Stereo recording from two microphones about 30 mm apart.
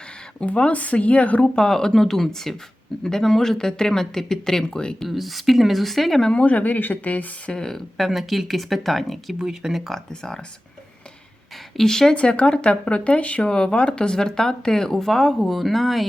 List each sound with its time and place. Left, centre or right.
0.3 s speech: left
1.5 s speech: left
4.8 s speech: left
5.0 s speech: centre
6.1 s speech: left
6.4 s speech: left
7.5 s speech: left
7.9 s speech: centre
9.4 s speech: centre
11.8 s speech: centre
12.1 s speech: left
13.5 s speech: left
14.2 s speech: left; by 16.0 s centre